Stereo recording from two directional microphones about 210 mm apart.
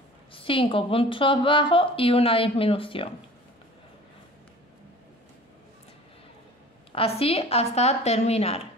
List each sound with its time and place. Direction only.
0.3 s a woman's voice: 25° left (ahead or behind)
6.9 s a woman's voice: 25° left (ahead or behind)